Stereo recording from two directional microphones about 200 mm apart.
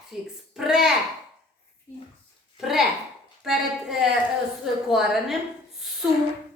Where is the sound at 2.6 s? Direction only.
Centre (ahead or behind).